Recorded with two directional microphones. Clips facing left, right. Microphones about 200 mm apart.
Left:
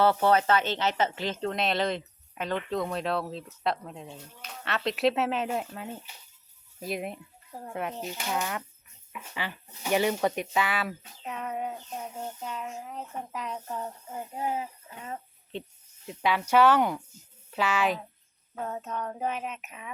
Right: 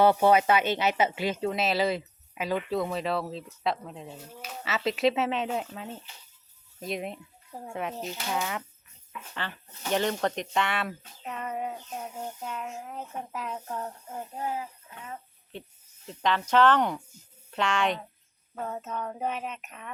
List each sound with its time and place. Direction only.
0.0 s speech: 15° right (ahead or behind); by 14.3 s centre (ahead or behind)
14.3 s speech: 20° left (ahead or behind)
16.0 s speech: 10° left (ahead or behind)